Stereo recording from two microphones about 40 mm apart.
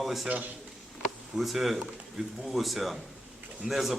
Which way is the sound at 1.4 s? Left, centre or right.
Centre.